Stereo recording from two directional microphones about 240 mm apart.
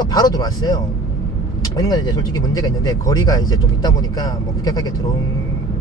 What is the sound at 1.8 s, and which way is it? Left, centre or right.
Speech, centre.